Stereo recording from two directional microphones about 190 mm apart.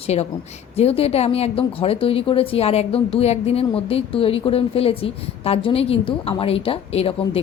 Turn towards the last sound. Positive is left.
turn(degrees=30)  # may be behind; listen again after turning